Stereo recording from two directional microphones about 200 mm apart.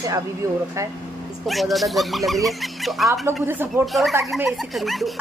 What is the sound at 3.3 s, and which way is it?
Speech, 10° right (ahead or behind).